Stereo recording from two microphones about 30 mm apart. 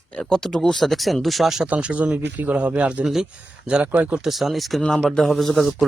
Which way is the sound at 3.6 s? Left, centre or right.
Right.